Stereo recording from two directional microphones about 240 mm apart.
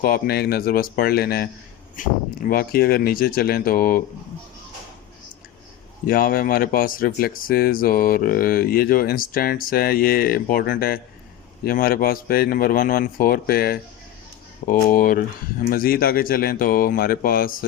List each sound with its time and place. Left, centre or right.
0.0 s speech: left
6.1 s speech: left